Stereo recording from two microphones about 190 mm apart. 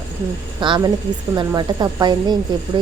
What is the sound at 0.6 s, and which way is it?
A woman's voice, 25° right (ahead or behind).